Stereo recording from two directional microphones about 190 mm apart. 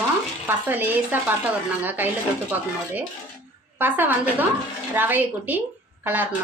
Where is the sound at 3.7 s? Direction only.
10° right (ahead or behind).